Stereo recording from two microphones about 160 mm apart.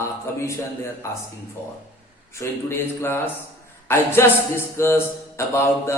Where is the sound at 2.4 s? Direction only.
15° left (ahead or behind).